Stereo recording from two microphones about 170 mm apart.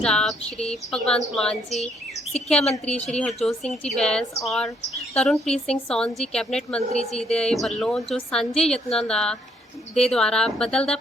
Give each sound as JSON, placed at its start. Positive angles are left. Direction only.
{"t": 0.0, "sound": "a woman's voice", "side_deg": 5}
{"t": 6.7, "sound": "a woman's voice", "side_deg": 40}
{"t": 7.2, "sound": "a woman's voice", "side_deg": 5}